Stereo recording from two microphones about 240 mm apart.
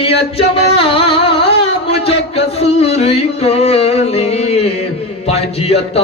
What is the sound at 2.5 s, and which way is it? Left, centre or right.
Music, left.